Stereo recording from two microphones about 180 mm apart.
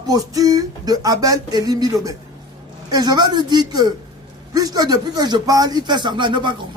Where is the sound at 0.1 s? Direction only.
20° right (ahead or behind).